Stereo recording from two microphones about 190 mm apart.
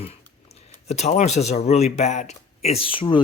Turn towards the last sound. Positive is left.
turn(degrees=25)  # may be behind; listen again after turning